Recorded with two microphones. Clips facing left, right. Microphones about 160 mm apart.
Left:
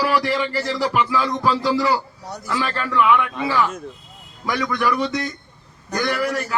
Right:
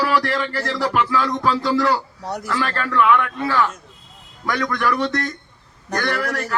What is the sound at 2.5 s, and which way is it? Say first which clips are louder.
Speech: left 1 dB; 5° left (ahead or behind).